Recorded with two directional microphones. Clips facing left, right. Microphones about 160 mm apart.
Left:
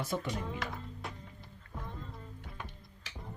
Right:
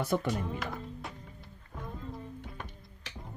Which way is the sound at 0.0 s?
55° right (ahead or behind).